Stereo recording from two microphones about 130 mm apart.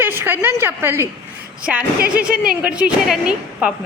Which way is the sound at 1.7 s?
10° right (ahead or behind).